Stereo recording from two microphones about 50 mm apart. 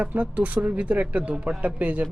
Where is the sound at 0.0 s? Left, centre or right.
Right.